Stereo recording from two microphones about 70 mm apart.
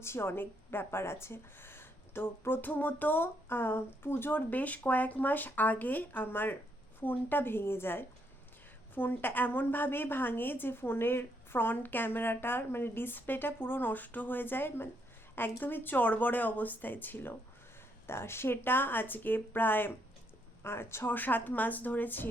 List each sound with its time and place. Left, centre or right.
0.0 s a woman's voice: left